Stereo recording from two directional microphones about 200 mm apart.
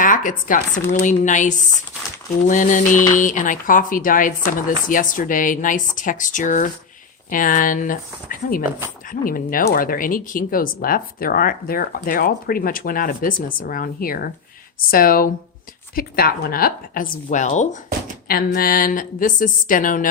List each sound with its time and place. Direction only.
0.0 s speech: 40° left (ahead or behind)
18.3 s speech: 50° left (ahead or behind)